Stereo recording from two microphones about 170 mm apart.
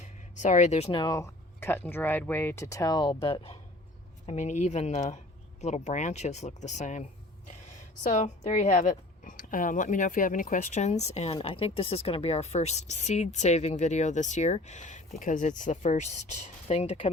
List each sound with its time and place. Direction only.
0.3 s a woman's voice: 45° left (ahead or behind)
0.9 s speech: 20° left (ahead or behind)
4.3 s a woman's voice: 45° left (ahead or behind)